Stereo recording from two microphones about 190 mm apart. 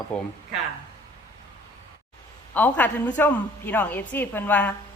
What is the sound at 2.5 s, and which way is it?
Speech, 10° left (ahead or behind).